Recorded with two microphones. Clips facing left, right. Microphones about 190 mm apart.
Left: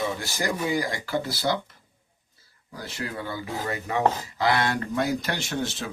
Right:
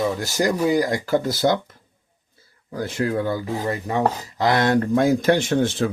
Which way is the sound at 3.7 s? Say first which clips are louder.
Right 3 dB; 35° right (ahead or behind).